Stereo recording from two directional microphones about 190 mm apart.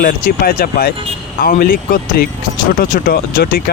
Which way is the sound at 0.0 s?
45° left (ahead or behind).